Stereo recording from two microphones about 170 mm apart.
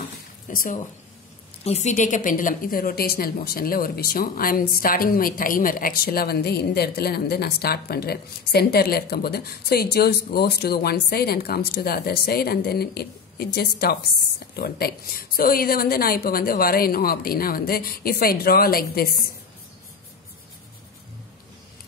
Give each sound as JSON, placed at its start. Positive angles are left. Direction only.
{"t": 0.5, "sound": "a woman's voice", "side_deg": 55}
{"t": 1.6, "sound": "a woman's voice", "side_deg": 40}